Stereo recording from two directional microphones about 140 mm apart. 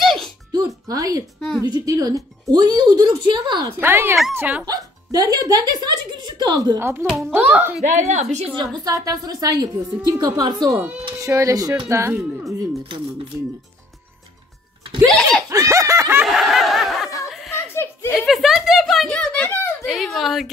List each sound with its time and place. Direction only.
0.0 s music: centre (ahead or behind)
0.5 s music: 25° right (ahead or behind)
1.6 s speech: 25° right (ahead or behind)
3.8 s speech: 15° right (ahead or behind)
4.6 s speech: 25° right (ahead or behind)
6.8 s speech: 15° right (ahead or behind)
7.1 s speech: 5° right (ahead or behind)
7.8 s a woman's voice: 55° right (ahead or behind)
8.7 s speech: 25° right (ahead or behind)
15.5 s snicker: 20° right (ahead or behind)
16.3 s snicker: centre (ahead or behind)
17.3 s a sound: centre (ahead or behind)
19.8 s speech: centre (ahead or behind)